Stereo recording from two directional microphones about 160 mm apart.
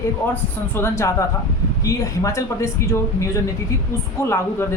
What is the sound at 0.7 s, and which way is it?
A woman's voice, 15° left (ahead or behind).